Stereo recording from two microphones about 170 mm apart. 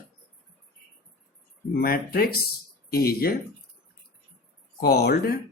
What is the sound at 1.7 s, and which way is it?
Speech, 60° left (ahead or behind).